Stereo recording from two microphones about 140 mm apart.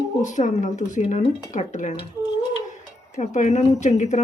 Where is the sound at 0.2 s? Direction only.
60° left (ahead or behind).